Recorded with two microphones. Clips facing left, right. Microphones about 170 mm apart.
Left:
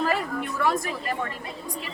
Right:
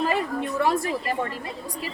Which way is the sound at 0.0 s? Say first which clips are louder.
Right 1 dB; 20° right (ahead or behind).